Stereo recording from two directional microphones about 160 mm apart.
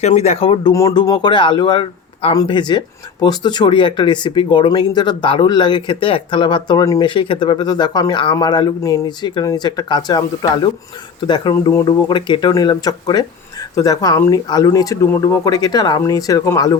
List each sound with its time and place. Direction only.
0.0 s speech: 40° left (ahead or behind)
0.7 s speech: 20° left (ahead or behind)